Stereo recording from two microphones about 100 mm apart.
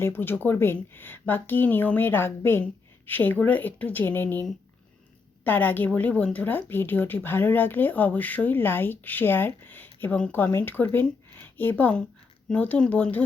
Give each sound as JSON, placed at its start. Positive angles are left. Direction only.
{"t": 0.0, "sound": "speech", "side_deg": 20}
{"t": 5.5, "sound": "speech", "side_deg": 15}